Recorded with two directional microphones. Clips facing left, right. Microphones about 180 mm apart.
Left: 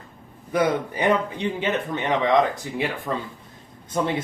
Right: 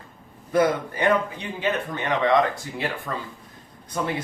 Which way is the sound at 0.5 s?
15° left (ahead or behind).